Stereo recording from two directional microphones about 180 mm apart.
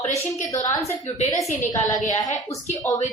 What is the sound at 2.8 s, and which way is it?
Speech, 10° left (ahead or behind).